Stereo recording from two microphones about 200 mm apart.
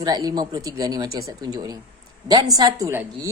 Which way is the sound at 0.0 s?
20° right (ahead or behind).